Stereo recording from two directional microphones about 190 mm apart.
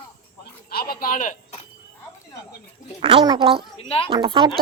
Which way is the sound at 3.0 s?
25° right (ahead or behind).